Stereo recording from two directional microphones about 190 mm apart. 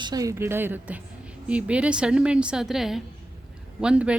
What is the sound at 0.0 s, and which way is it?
Speech, 20° right (ahead or behind).